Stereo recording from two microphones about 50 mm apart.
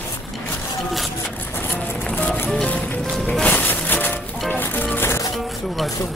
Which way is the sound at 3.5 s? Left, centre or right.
Left.